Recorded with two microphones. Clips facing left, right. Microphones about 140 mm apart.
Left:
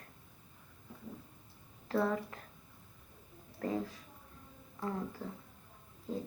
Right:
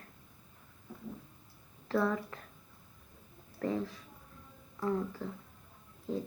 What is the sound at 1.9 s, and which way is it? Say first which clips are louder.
Speech: right 1 dB; 35° left (ahead or behind).